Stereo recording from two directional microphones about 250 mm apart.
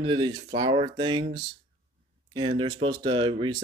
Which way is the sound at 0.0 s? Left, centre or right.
Centre.